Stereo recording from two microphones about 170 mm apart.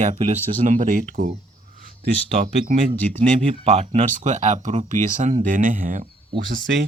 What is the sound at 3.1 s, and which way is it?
Speech, 35° right (ahead or behind).